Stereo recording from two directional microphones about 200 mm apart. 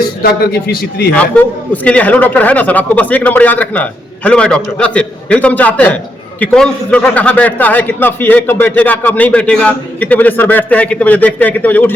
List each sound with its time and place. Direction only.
1.1 s a man's voice: 5° left (ahead or behind)